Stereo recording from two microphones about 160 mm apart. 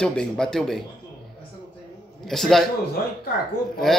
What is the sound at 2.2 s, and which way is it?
Speech, centre (ahead or behind).